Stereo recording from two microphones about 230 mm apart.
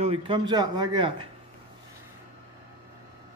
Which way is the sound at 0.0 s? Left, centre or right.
Right.